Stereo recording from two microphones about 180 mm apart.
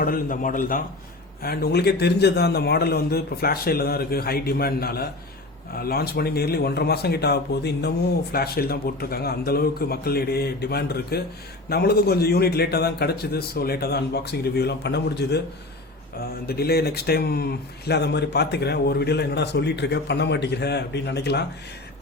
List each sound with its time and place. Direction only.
0.0 s a man's voice: 50° left (ahead or behind); by 15.4 s 70° left (ahead or behind)
16.5 s speech: 60° left (ahead or behind)